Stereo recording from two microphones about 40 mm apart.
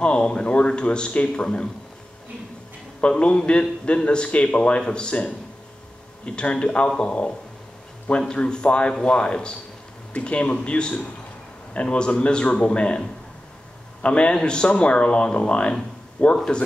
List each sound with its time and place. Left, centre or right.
0.0 s a man's voice: left
3.0 s a man's voice: left
6.2 s a man's voice: left
14.0 s a man's voice: left
16.2 s speech: left